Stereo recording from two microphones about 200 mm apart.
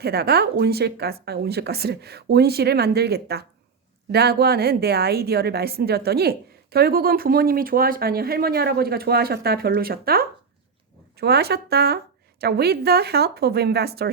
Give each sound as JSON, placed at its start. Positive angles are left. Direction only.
{"t": 0.0, "sound": "speech", "side_deg": -55}